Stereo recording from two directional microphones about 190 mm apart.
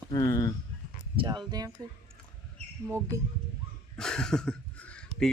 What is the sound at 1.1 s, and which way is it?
Speech, 20° right (ahead or behind).